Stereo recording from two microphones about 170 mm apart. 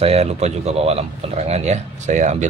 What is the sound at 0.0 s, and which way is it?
Speech, 35° right (ahead or behind).